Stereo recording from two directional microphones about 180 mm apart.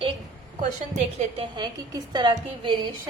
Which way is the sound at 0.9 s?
30° right (ahead or behind).